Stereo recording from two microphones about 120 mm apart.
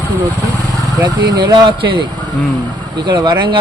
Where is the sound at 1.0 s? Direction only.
35° right (ahead or behind).